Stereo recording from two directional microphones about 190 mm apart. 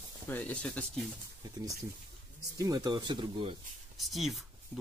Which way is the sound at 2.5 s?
20° right (ahead or behind).